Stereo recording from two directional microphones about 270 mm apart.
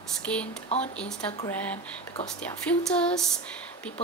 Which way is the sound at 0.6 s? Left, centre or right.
Left.